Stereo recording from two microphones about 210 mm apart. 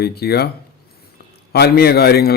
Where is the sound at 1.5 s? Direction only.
50° left (ahead or behind).